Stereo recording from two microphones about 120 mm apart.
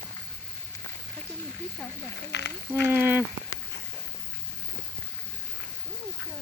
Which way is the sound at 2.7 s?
15° right (ahead or behind).